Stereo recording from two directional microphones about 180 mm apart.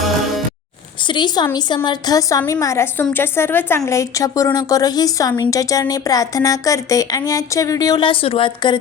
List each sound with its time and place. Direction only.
1.0 s a woman's voice: 25° left (ahead or behind)